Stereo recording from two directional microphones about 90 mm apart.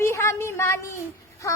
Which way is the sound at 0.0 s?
30° left (ahead or behind).